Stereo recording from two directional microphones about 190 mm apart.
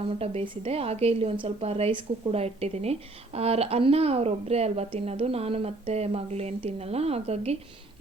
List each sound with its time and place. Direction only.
0.2 s a woman's voice: 30° right (ahead or behind)